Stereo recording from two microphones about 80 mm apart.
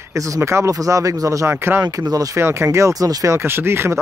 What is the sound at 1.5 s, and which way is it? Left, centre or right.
Speech, right.